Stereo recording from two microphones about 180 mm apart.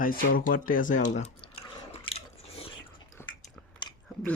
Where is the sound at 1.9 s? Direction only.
30° left (ahead or behind).